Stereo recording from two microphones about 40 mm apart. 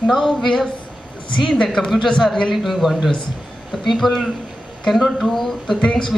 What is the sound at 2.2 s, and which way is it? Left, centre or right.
Speech, centre.